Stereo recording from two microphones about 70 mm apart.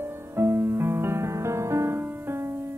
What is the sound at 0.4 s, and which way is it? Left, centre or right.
Music, right.